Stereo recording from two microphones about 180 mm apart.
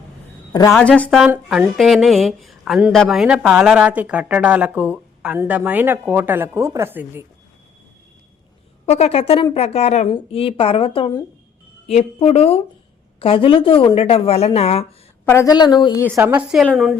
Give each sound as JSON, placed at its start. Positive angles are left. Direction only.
{"t": 0.7, "sound": "speech", "side_deg": 5}
{"t": 1.3, "sound": "speech", "side_deg": -5}
{"t": 8.9, "sound": "a woman's voice", "side_deg": 35}
{"t": 15.2, "sound": "a woman's voice", "side_deg": 15}
{"t": 16.0, "sound": "speech", "side_deg": -10}